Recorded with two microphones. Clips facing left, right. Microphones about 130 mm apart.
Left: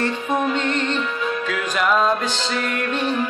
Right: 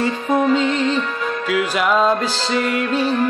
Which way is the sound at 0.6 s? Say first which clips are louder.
Right 4 dB; 5° right (ahead or behind).